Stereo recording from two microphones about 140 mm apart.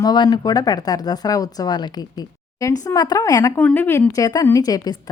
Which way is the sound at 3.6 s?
10° left (ahead or behind).